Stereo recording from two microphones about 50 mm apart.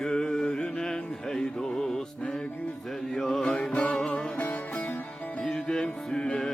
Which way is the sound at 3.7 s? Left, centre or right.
Left.